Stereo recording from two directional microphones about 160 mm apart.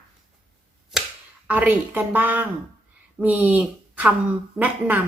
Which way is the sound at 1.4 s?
10° right (ahead or behind).